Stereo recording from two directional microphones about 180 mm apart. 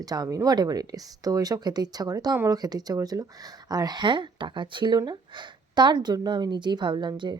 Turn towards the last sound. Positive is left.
turn(degrees=-25)  # may be behind; listen again after turning